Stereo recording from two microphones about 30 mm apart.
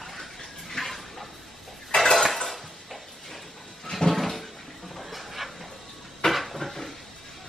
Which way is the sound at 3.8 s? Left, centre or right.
Centre.